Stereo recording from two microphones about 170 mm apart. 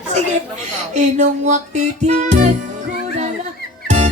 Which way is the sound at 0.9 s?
45° right (ahead or behind).